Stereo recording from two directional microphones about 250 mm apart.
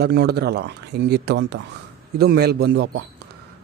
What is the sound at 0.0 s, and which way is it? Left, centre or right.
A man's voice, right.